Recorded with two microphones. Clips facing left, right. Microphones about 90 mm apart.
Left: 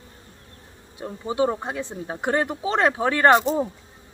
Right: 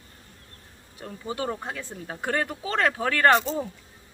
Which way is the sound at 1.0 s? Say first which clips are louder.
Left 8 dB; 20° left (ahead or behind).